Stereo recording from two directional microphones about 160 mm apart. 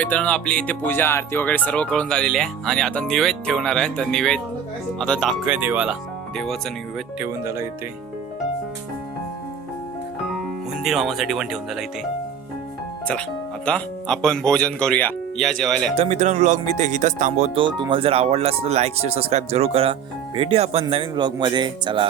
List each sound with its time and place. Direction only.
0.0 s speech: 5° left (ahead or behind)
5.5 s speech: 10° right (ahead or behind)
7.2 s speech: 15° right (ahead or behind)
10.8 s speech: centre (ahead or behind)
13.7 s speech: 5° left (ahead or behind)
16.0 s speech: 45° right (ahead or behind)
17.6 s speech: 30° right (ahead or behind)